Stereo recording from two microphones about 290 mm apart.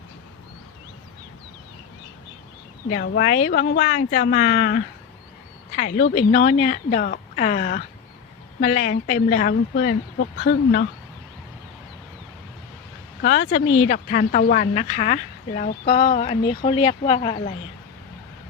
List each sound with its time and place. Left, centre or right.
2.9 s speech: left
13.2 s speech: left